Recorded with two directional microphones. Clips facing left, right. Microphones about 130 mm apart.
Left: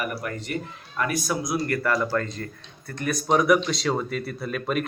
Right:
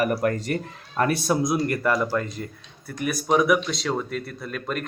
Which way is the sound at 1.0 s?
30° right (ahead or behind).